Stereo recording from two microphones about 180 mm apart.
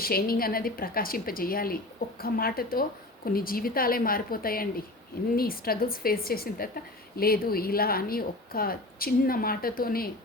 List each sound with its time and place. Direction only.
0.0 s a woman's voice: 55° left (ahead or behind)